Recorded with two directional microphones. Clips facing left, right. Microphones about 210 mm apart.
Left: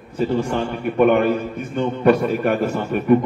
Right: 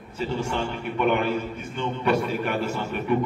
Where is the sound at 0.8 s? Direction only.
50° left (ahead or behind).